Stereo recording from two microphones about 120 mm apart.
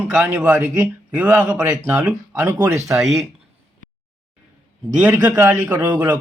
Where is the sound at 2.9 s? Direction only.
Centre (ahead or behind).